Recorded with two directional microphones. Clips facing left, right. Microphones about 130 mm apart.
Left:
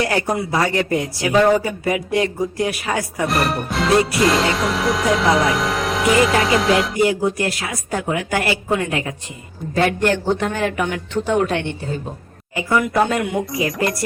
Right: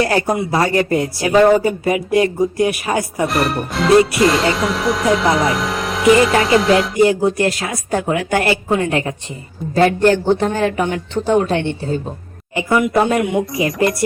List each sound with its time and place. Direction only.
0.0 s speech: 35° right (ahead or behind)
3.2 s speech: centre (ahead or behind)
7.0 s speech: 30° right (ahead or behind)